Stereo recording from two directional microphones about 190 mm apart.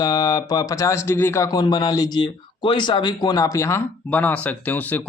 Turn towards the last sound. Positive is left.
turn(degrees=10)  # may be behind; listen again after turning